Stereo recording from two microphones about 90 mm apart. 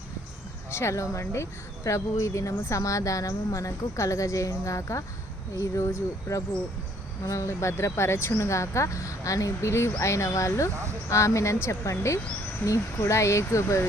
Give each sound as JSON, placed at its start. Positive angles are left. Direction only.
{"t": 0.7, "sound": "speech", "side_deg": 30}